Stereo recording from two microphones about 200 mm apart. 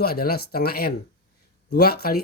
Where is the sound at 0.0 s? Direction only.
50° left (ahead or behind).